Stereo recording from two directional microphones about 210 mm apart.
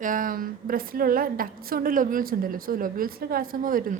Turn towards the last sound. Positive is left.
turn(degrees=-40)  # may be behind; listen again after turning